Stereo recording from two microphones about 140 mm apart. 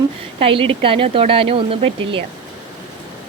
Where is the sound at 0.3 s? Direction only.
40° right (ahead or behind).